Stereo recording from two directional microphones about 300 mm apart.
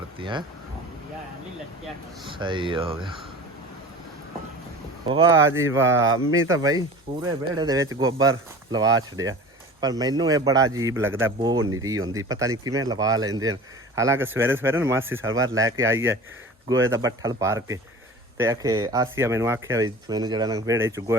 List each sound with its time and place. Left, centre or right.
0.2 s speech: centre
2.3 s speech: centre
5.0 s speech: centre
15.3 s speech: right
15.5 s speech: centre